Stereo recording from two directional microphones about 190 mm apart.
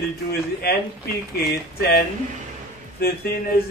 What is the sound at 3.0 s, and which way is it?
Speech, 50° left (ahead or behind).